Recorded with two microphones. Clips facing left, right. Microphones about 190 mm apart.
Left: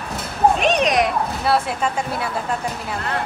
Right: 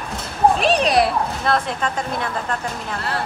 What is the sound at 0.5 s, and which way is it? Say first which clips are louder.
Cat: right 1 dB; 35° right (ahead or behind).